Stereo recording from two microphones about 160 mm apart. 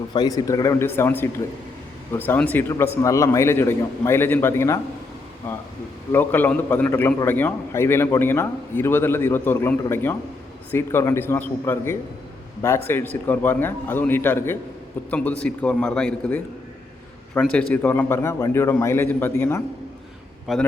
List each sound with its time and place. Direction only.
0.1 s a man's voice: 25° left (ahead or behind)
6.1 s a man's voice: 10° left (ahead or behind)
20.5 s a man's voice: centre (ahead or behind)